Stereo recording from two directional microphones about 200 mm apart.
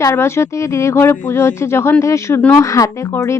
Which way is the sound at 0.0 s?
15° left (ahead or behind).